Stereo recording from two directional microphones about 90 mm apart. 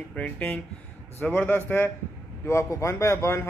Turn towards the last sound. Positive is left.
turn(degrees=30)  # may be behind; listen again after turning